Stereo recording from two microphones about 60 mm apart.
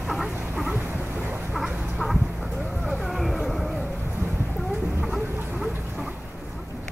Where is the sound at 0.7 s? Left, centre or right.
Right.